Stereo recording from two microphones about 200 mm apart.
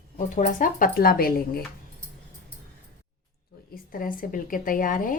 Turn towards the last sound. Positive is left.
turn(degrees=45)  # may be behind; listen again after turning